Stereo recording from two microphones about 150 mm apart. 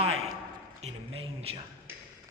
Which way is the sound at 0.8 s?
40° right (ahead or behind).